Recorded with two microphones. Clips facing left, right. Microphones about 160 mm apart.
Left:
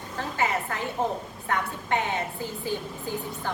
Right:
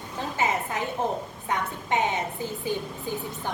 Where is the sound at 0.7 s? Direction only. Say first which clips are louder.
Right 1 dB; 20° right (ahead or behind).